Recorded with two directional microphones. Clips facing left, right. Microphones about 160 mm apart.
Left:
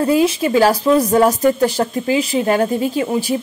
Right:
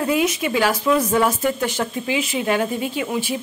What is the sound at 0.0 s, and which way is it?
Speech, 35° left (ahead or behind).